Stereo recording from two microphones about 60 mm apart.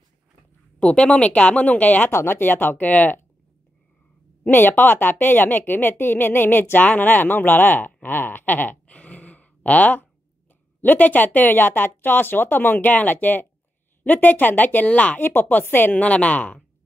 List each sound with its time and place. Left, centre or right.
0.7 s a woman's voice: centre
2.0 s a woman's voice: left
4.5 s a woman's voice: left
15.1 s a woman's voice: left